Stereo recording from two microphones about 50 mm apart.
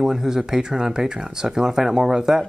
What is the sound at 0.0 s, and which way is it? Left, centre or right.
Speech, centre.